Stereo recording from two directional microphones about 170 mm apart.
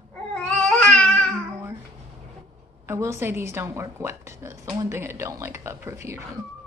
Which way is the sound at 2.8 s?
15° right (ahead or behind).